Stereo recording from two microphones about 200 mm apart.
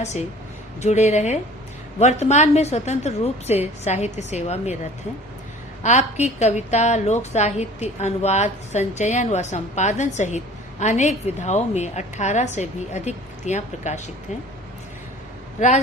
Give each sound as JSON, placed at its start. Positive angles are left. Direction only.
{"t": 0.0, "sound": "a woman's voice", "side_deg": 35}
{"t": 5.8, "sound": "a woman's voice", "side_deg": 35}
{"t": 15.6, "sound": "a woman's voice", "side_deg": 40}